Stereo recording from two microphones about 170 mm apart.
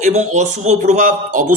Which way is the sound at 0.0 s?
45° right (ahead or behind).